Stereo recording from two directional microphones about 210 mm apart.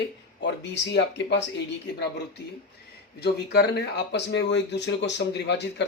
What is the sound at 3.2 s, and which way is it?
Speech, 50° left (ahead or behind).